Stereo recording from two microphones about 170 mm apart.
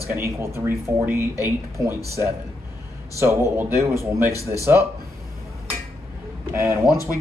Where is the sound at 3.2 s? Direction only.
15° right (ahead or behind).